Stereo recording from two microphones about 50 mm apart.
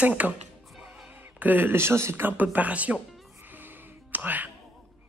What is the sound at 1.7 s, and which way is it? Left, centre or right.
Speech, right.